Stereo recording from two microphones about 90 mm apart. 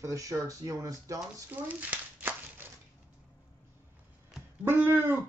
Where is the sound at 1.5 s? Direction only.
20° right (ahead or behind).